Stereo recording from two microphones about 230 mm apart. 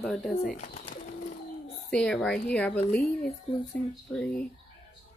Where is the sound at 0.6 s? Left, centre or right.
Left.